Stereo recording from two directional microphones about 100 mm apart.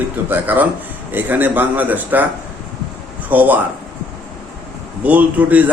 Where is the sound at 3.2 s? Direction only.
15° right (ahead or behind).